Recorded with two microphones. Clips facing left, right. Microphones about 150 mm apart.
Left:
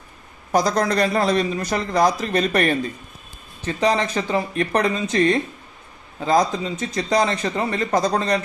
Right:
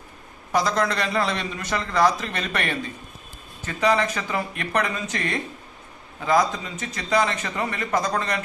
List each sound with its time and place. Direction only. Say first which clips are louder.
0.5 s a man's voice: left 4 dB; 40° left (ahead or behind)